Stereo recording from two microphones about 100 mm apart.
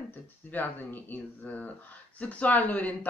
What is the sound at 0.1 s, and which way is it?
Speech, 20° left (ahead or behind).